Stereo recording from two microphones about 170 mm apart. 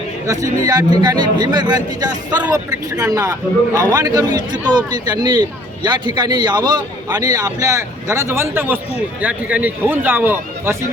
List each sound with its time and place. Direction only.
0.3 s a man's voice: 20° right (ahead or behind)